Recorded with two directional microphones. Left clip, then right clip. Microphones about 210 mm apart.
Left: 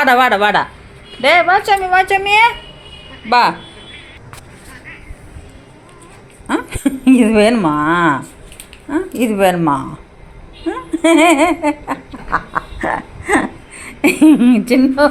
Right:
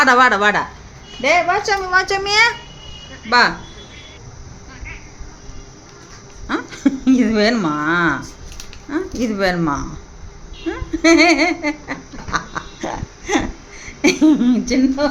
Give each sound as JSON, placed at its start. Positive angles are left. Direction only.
{"t": 0.0, "sound": "a woman's voice", "side_deg": -10}
{"t": 3.2, "sound": "speech", "side_deg": 15}
{"t": 6.8, "sound": "speech", "side_deg": 10}
{"t": 12.5, "sound": "a sound", "side_deg": 0}
{"t": 13.7, "sound": "speech", "side_deg": 20}